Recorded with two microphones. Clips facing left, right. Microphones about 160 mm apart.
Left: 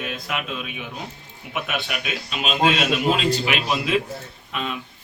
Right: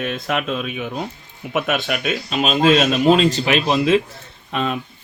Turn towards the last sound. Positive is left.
turn(degrees=-45)  # may be behind; listen again after turning